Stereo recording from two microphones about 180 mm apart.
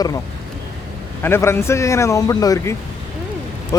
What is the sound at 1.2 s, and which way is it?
Speech, 15° left (ahead or behind).